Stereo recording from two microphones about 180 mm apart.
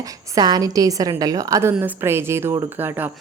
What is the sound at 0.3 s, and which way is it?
A woman's voice, 20° right (ahead or behind).